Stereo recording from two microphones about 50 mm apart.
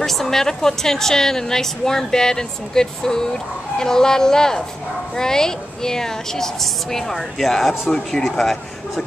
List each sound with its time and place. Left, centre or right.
0.0 s speech: centre